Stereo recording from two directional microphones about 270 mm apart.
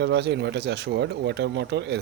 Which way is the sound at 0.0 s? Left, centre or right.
Right.